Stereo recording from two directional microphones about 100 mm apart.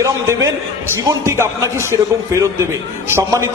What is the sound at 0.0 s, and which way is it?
A man's voice, 30° right (ahead or behind).